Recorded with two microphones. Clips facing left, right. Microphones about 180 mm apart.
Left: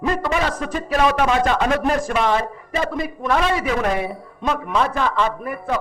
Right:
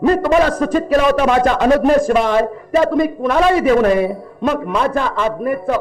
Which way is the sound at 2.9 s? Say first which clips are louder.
Right 8 dB; 60° right (ahead or behind).